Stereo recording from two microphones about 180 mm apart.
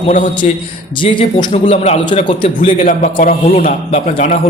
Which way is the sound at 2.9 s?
50° left (ahead or behind).